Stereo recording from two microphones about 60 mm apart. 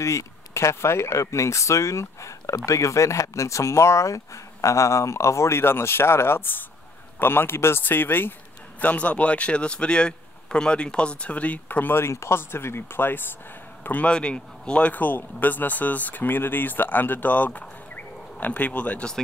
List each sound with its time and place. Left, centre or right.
0.0 s speech: left
11.9 s speech: left
14.0 s speech: centre